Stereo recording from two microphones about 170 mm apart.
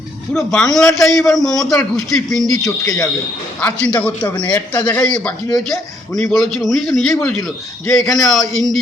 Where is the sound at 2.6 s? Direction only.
20° left (ahead or behind).